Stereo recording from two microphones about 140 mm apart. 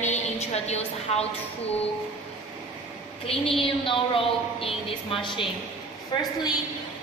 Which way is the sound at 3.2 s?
45° left (ahead or behind).